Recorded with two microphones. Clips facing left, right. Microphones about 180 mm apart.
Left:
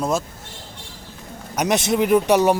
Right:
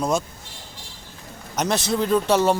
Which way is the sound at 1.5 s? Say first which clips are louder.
Left 3 dB; 20° left (ahead or behind).